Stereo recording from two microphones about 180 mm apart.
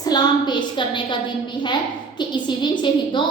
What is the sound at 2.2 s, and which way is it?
A woman's voice, 25° left (ahead or behind).